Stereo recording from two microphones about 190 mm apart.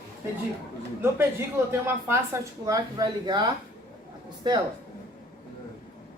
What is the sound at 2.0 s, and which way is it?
Speech, 15° right (ahead or behind).